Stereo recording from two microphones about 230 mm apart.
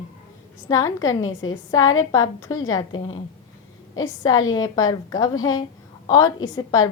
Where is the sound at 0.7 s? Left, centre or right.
Centre.